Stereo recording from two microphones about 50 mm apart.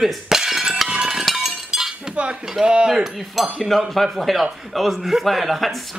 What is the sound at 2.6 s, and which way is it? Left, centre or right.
Speech, centre.